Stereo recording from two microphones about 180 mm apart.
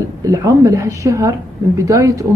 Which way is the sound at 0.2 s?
20° right (ahead or behind).